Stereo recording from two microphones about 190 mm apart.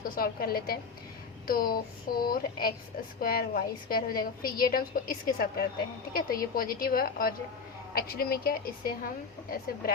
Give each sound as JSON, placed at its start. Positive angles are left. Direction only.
{"t": 0.0, "sound": "a woman's voice", "side_deg": 50}